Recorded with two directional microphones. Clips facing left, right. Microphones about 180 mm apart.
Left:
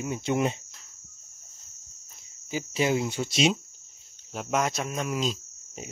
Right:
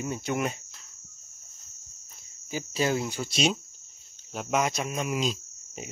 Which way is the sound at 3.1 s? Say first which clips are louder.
Left 2 dB; centre (ahead or behind).